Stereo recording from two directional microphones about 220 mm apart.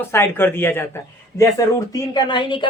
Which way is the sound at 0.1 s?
10° left (ahead or behind).